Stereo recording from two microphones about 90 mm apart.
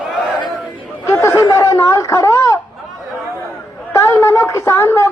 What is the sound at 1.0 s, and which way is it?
Snicker, 30° left (ahead or behind).